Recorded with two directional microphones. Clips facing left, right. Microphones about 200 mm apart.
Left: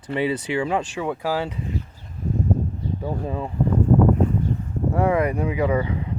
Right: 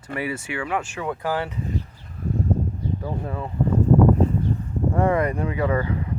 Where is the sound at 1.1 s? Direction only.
10° left (ahead or behind).